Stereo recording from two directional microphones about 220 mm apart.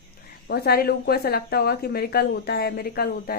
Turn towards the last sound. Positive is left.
turn(degrees=45)  # may be behind; listen again after turning